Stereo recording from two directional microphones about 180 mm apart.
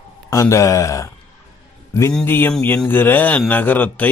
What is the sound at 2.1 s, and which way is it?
Speech, 10° left (ahead or behind).